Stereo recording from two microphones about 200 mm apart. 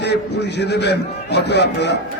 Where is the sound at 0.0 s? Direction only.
55° left (ahead or behind).